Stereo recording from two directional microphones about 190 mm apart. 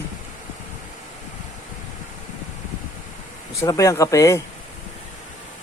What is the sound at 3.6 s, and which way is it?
Speech, 15° left (ahead or behind).